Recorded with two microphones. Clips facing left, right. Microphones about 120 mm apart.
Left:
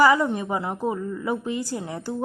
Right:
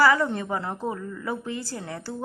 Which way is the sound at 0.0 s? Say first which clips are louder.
Left 2 dB; 15° left (ahead or behind).